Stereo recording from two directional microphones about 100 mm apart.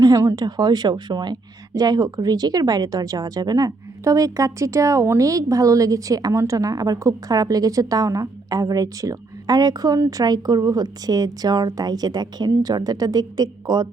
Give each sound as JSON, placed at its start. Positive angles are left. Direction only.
{"t": 0.0, "sound": "a woman's voice", "side_deg": -35}